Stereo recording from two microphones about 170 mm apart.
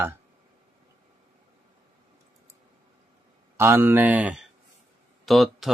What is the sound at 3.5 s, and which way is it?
Speech, 15° right (ahead or behind).